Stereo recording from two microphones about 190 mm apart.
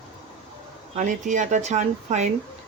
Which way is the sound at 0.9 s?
40° right (ahead or behind).